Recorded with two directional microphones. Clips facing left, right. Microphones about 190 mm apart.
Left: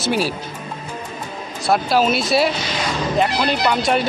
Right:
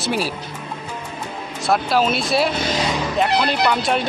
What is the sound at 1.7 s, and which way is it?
Speech, centre (ahead or behind).